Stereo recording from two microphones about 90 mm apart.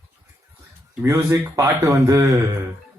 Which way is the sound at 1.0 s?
30° right (ahead or behind).